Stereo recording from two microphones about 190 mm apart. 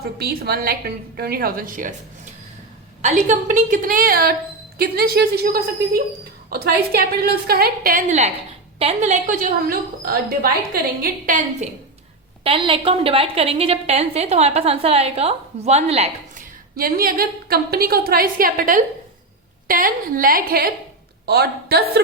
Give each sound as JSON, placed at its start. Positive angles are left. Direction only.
{"t": 0.2, "sound": "a woman's voice", "side_deg": -55}
{"t": 3.0, "sound": "a woman's voice", "side_deg": -40}
{"t": 12.4, "sound": "a woman's voice", "side_deg": -25}
{"t": 16.7, "sound": "a woman's voice", "side_deg": -50}